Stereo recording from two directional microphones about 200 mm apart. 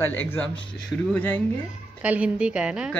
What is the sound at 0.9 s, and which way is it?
Speech, 5° left (ahead or behind).